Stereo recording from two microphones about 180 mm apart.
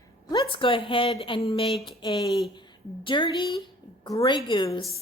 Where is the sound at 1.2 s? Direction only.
30° left (ahead or behind).